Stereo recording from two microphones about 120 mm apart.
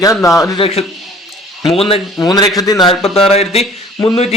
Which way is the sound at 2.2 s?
35° left (ahead or behind).